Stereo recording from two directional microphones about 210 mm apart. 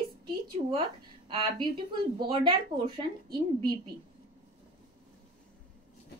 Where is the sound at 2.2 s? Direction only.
25° right (ahead or behind).